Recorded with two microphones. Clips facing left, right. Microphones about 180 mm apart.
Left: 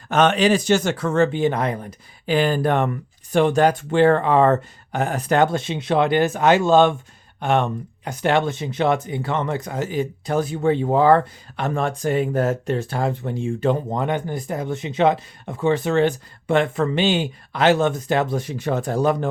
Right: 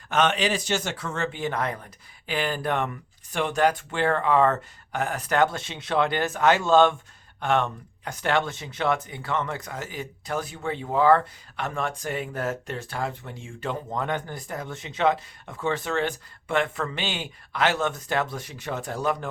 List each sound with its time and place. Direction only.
0.1 s speech: 40° left (ahead or behind)
1.3 s speech: 20° left (ahead or behind)
2.2 s speech: 35° left (ahead or behind)